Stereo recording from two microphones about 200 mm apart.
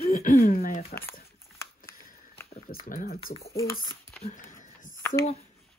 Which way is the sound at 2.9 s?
45° left (ahead or behind).